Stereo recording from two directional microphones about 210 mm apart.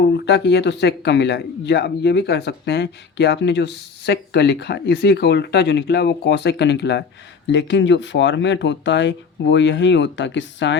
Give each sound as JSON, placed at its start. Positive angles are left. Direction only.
{"t": 0.0, "sound": "speech", "side_deg": 55}